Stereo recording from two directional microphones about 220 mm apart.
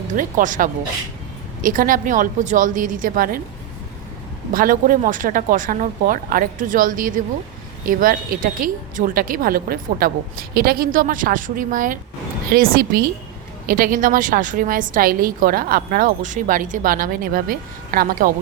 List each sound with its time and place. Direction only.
0.1 s a woman's voice: 35° right (ahead or behind)
4.5 s a woman's voice: 40° right (ahead or behind)